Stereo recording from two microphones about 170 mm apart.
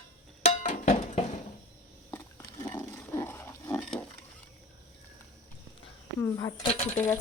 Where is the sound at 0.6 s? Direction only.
40° left (ahead or behind).